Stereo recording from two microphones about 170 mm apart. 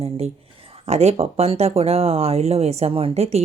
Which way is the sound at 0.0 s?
35° right (ahead or behind).